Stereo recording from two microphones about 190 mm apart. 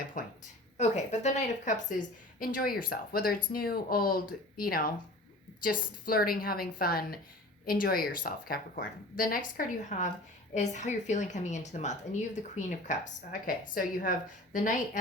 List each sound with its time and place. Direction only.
0.2 s a woman's voice: 45° left (ahead or behind)